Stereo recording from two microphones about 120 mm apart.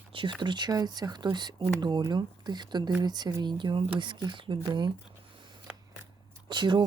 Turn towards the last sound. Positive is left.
turn(degrees=-40)  # may be behind; listen again after turning